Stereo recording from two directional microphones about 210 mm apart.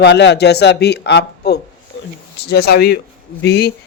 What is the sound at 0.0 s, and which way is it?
Speech, 55° left (ahead or behind).